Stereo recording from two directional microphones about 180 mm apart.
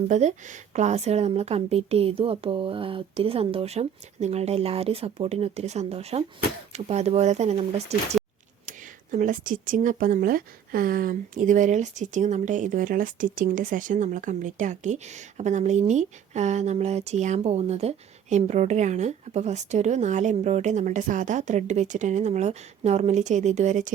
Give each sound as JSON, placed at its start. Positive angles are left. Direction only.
{"t": 0.1, "sound": "speech", "side_deg": -40}